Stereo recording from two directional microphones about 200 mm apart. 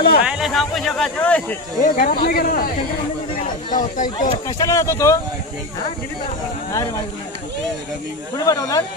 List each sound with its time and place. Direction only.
0.2 s speech: 5° right (ahead or behind)
1.8 s speech: 45° left (ahead or behind)
4.5 s speech: 15° left (ahead or behind)
8.5 s speech: 15° left (ahead or behind)